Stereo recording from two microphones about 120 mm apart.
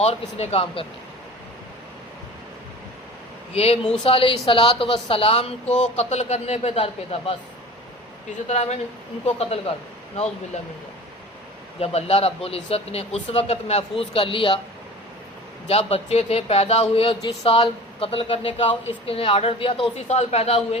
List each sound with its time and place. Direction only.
0.0 s speech: 60° left (ahead or behind)
3.5 s speech: 60° left (ahead or behind)
8.4 s speech: 65° left (ahead or behind)
11.8 s speech: 55° left (ahead or behind)
15.6 s speech: 55° left (ahead or behind)
20.1 s speech: 60° left (ahead or behind)